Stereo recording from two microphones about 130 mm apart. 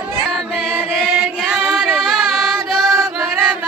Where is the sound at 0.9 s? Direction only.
Centre (ahead or behind).